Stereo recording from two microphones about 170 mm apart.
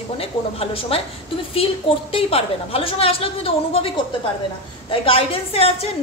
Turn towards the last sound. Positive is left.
turn(degrees=35)  # may be behind; listen again after turning